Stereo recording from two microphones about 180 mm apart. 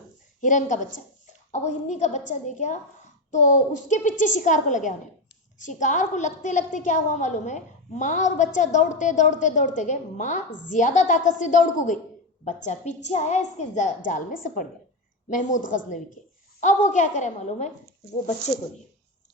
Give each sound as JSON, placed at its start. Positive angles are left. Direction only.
{"t": 0.4, "sound": "a woman's voice", "side_deg": 45}